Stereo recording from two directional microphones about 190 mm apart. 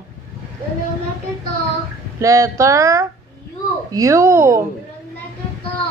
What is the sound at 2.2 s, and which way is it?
Speech, 15° right (ahead or behind).